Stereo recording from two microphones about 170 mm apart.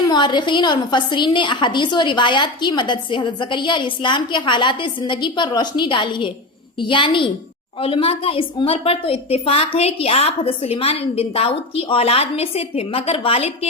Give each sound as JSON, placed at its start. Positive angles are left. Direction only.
{"t": 0.1, "sound": "a woman's voice", "side_deg": 25}